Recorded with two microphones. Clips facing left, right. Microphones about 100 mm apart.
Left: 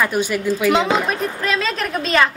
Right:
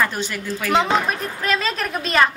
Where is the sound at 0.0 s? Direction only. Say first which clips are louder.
Left 4 dB; 10° left (ahead or behind).